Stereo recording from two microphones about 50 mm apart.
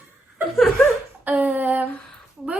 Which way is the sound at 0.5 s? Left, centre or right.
Centre.